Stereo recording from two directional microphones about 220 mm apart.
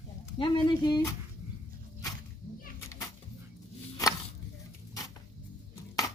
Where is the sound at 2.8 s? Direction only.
15° left (ahead or behind).